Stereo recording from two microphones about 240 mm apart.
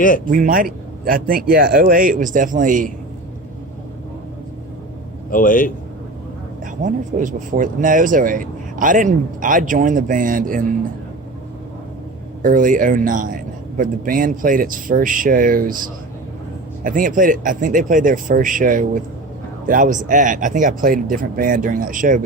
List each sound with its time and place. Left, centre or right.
0.3 s speech: right
5.3 s a man's voice: left
6.8 s speech: right
12.4 s speech: right